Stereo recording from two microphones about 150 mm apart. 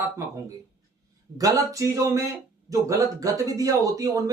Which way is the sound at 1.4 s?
25° right (ahead or behind).